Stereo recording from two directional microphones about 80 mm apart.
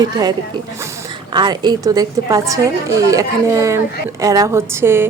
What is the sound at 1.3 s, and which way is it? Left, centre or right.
A woman's voice, right.